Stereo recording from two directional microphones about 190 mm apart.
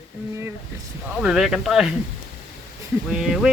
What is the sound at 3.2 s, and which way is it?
Speech, 5° right (ahead or behind).